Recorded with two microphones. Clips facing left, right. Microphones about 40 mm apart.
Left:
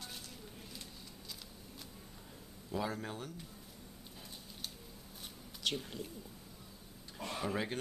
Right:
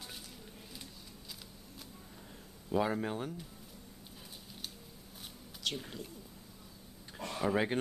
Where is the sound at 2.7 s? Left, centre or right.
Right.